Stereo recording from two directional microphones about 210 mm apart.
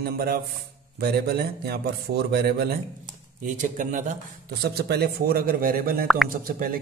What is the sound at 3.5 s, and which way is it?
Speech, 35° right (ahead or behind).